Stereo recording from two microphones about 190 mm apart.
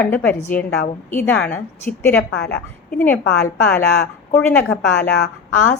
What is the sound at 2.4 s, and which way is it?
Speech, 60° left (ahead or behind).